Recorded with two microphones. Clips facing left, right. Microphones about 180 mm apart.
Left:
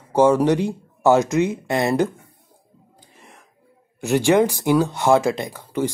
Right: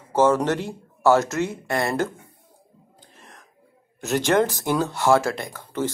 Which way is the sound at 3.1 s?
15° left (ahead or behind).